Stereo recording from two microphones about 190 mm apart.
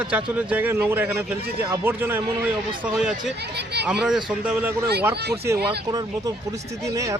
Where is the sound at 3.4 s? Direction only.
60° right (ahead or behind).